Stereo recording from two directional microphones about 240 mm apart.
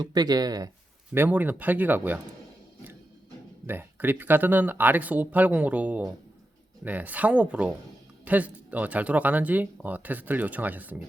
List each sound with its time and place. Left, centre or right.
0.0 s speech: centre
3.7 s speech: centre